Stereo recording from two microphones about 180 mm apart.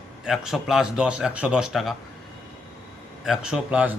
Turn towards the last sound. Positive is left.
turn(degrees=-5)  # may be behind; listen again after turning